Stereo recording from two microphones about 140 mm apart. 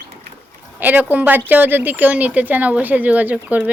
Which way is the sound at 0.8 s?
10° right (ahead or behind).